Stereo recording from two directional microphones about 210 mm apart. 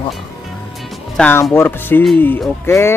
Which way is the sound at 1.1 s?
5° left (ahead or behind).